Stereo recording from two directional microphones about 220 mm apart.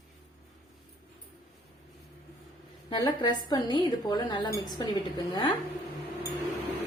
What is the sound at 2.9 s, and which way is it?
A woman's voice, 20° left (ahead or behind).